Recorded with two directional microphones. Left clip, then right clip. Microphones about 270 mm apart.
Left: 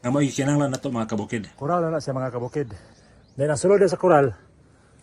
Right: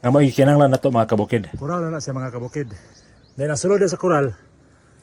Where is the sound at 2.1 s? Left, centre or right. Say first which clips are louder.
Left 2 dB; centre.